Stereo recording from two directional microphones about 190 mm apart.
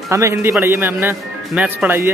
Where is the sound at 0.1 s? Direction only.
15° right (ahead or behind).